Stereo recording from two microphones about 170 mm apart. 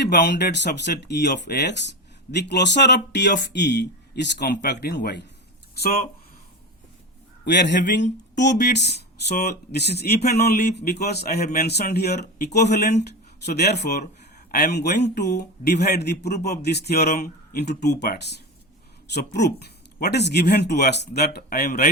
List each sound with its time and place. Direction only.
0.0 s speech: 80° left
7.4 s speech: 90° left; by 21.8 s 65° left (ahead or behind)